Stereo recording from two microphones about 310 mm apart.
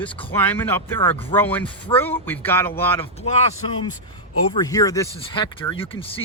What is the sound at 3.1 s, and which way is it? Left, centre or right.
Speech, centre.